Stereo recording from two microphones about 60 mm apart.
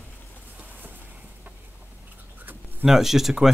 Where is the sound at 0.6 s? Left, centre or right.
Right.